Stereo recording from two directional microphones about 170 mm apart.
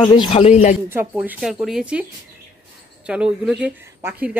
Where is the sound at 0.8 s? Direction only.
15° right (ahead or behind).